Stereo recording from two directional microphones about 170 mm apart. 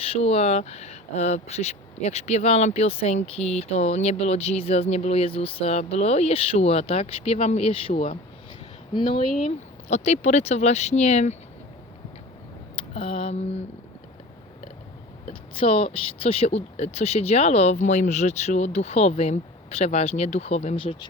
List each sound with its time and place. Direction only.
0.0 s speech: 35° left (ahead or behind)
12.7 s a sound: 35° left (ahead or behind)
15.5 s speech: 35° left (ahead or behind)